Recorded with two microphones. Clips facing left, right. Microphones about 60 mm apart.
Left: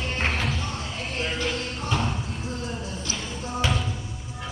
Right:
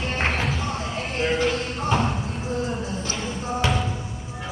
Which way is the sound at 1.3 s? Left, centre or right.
Centre.